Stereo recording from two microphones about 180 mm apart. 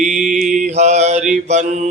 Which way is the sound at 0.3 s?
45° right (ahead or behind).